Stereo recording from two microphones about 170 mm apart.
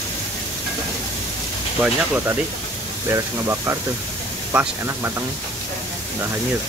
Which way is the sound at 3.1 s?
15° right (ahead or behind).